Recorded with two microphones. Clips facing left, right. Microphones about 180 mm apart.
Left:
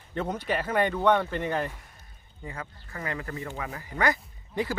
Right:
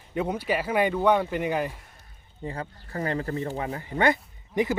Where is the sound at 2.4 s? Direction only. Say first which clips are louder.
Right 5 dB; 35° right (ahead or behind).